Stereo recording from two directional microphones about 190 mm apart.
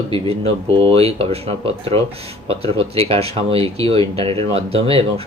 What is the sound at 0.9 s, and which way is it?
Speech, 30° right (ahead or behind).